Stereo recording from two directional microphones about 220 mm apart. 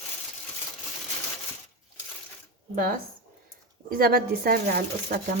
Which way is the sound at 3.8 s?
45° right (ahead or behind).